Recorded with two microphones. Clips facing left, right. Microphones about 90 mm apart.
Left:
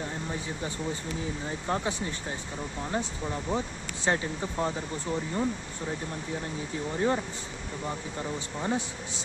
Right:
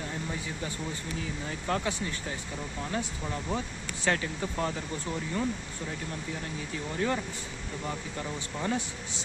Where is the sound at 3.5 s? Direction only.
25° left (ahead or behind).